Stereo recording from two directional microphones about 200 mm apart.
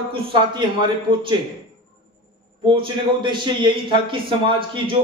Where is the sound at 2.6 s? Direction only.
25° right (ahead or behind).